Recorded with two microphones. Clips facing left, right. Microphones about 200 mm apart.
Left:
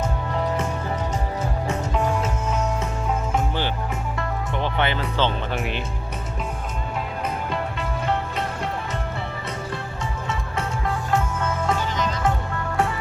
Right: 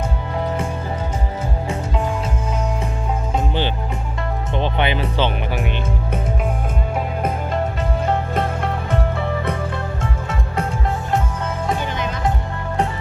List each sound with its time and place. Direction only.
3.3 s music: 20° right (ahead or behind)
5.5 s speech: centre (ahead or behind)
7.2 s music: 45° right (ahead or behind)
8.9 s music: 55° right (ahead or behind)